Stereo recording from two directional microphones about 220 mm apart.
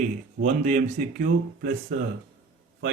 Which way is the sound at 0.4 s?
35° right (ahead or behind).